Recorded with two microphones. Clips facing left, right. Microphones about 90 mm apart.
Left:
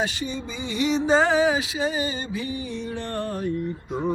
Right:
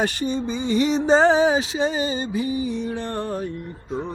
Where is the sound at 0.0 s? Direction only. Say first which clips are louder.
Right 5 dB; 50° right (ahead or behind); by 3.4 s 20° right (ahead or behind).